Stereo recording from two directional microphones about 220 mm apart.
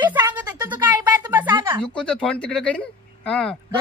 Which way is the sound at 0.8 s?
5° right (ahead or behind).